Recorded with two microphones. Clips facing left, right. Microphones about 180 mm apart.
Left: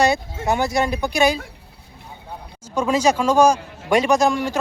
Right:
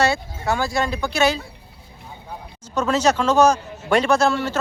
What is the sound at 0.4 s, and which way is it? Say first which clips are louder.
Speech: left 2 dB; 20° left (ahead or behind).